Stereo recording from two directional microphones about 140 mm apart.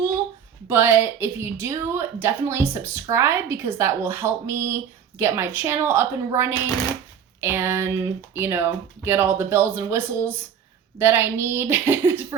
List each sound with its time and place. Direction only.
0.7 s a woman's voice: 15° right (ahead or behind)